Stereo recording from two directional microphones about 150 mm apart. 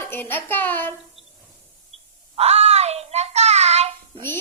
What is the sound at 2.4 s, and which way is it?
Child singing, 45° right (ahead or behind).